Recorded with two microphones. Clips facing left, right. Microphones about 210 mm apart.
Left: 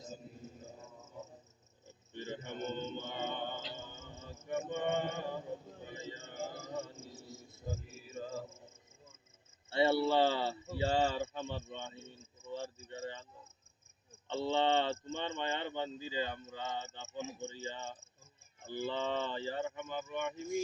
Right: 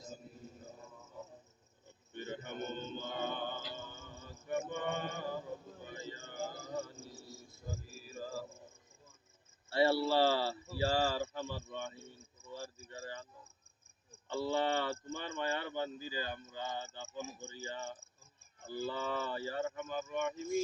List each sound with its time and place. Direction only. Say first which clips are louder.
2.1 s a sound: even; 25° left (ahead or behind)
9.6 s cricket: even; 20° left (ahead or behind)
14.3 s speech: left 2 dB; 25° left (ahead or behind)